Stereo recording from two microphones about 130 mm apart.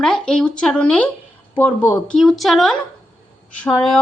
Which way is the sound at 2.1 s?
Centre (ahead or behind).